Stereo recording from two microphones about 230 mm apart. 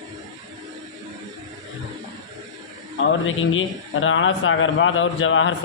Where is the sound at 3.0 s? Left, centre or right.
Left.